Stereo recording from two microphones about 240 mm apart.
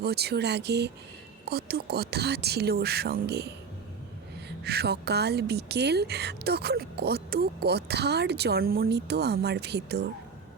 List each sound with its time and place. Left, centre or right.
0.0 s a woman's voice: right